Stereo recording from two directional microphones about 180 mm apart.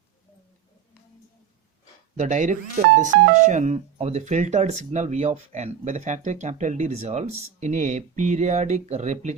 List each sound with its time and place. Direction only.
2.1 s speech: 40° right (ahead or behind)